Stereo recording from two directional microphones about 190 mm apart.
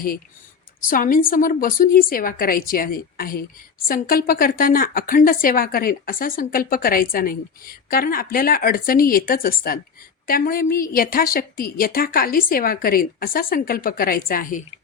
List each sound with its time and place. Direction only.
0.9 s a woman's voice: 45° left (ahead or behind)